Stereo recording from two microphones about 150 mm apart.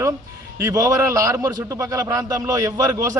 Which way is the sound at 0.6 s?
20° right (ahead or behind).